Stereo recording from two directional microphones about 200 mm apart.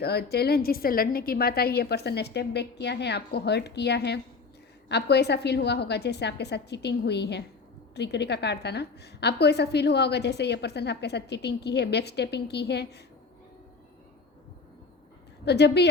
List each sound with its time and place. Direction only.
0.0 s a woman's voice: 55° left (ahead or behind)
15.4 s a woman's voice: 55° left (ahead or behind)